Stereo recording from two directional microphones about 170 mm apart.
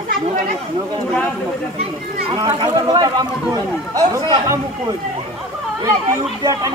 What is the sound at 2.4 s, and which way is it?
Speech, 30° right (ahead or behind).